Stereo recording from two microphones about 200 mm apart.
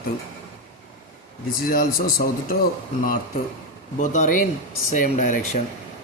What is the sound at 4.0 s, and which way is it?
Speech, 40° left (ahead or behind).